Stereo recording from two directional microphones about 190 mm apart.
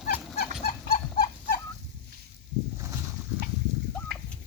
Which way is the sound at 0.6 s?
50° left (ahead or behind).